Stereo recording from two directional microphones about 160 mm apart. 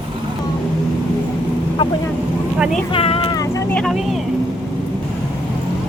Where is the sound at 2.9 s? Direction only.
35° left (ahead or behind).